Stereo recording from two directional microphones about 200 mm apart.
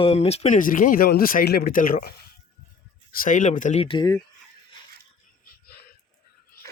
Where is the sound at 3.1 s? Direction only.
40° left (ahead or behind); by 4.2 s 20° left (ahead or behind).